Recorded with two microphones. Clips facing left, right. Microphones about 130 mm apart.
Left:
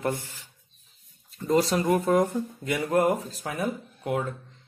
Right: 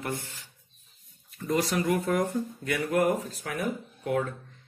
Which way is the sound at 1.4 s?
25° left (ahead or behind).